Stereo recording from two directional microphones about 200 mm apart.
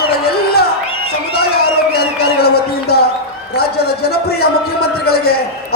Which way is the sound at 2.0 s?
50° left (ahead or behind).